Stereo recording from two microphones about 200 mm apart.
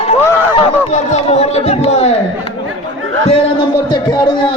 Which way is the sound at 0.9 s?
35° left (ahead or behind).